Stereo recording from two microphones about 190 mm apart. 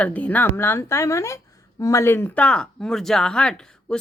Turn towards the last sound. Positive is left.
turn(degrees=5)  # may be behind; listen again after turning